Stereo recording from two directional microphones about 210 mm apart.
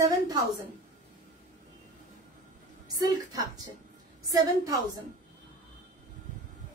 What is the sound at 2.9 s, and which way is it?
A woman's voice, 15° right (ahead or behind).